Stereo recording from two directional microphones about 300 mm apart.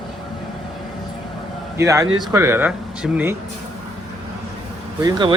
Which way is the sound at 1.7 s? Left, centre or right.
Centre.